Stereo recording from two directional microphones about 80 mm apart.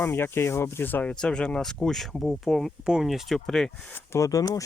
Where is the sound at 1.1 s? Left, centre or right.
Centre.